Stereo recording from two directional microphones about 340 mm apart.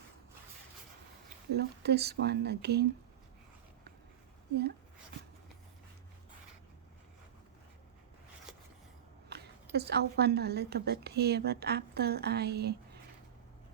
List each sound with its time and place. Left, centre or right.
1.5 s a woman's voice: right
9.7 s a woman's voice: right